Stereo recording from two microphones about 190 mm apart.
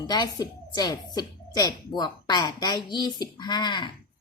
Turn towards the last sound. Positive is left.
turn(degrees=25)  # may be behind; listen again after turning